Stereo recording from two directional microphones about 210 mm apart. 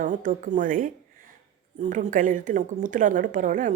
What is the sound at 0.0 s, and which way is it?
A woman's voice, 40° right (ahead or behind).